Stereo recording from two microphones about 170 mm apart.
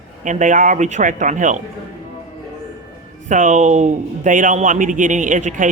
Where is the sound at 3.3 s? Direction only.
45° right (ahead or behind).